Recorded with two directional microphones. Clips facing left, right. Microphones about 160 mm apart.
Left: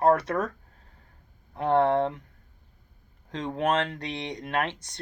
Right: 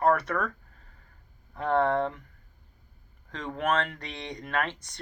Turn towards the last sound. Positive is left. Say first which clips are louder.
# left 2 dB
turn(degrees=20)  # may be behind; listen again after turning